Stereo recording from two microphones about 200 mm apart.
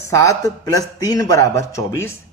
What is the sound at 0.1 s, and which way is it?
Speech, 15° left (ahead or behind).